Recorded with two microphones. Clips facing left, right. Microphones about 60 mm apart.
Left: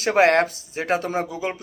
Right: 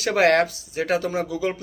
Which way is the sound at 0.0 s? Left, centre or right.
Left.